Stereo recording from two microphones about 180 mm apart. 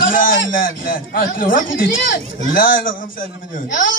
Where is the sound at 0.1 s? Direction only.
50° left (ahead or behind).